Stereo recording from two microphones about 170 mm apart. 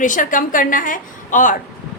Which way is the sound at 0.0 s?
50° left (ahead or behind).